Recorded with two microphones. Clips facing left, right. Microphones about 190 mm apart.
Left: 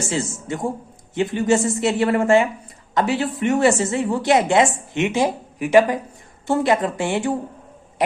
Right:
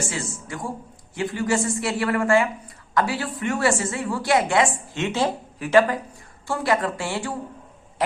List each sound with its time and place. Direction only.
0.1 s a woman's voice: 25° left (ahead or behind)